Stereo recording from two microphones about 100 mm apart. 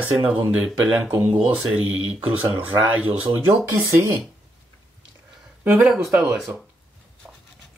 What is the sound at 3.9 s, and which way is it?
Speech, 25° right (ahead or behind).